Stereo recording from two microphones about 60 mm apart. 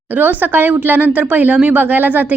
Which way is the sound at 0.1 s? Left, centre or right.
Right.